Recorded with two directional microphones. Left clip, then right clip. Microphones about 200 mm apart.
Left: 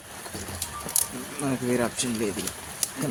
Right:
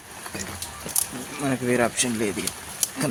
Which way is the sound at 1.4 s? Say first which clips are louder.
Right 4 dB; 5° right (ahead or behind).